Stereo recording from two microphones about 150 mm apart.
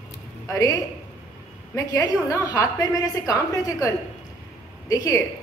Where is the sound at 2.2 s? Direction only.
20° left (ahead or behind).